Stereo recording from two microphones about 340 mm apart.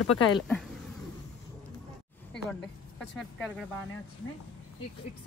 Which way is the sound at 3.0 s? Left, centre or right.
Centre.